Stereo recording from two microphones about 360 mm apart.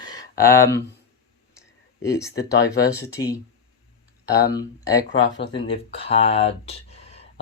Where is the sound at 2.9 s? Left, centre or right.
Centre.